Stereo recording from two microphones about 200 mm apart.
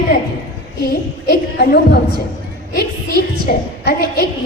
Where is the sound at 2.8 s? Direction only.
55° left (ahead or behind).